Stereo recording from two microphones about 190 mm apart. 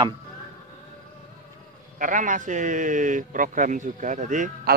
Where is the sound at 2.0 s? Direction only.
40° right (ahead or behind).